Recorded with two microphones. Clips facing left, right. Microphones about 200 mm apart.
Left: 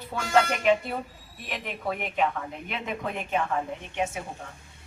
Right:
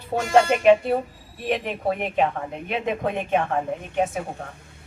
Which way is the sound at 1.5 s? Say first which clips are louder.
Right 8 dB; 35° right (ahead or behind).